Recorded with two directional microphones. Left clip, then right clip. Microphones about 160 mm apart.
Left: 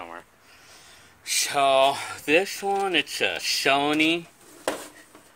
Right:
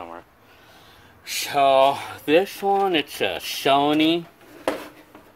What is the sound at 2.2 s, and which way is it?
Speech, 15° right (ahead or behind).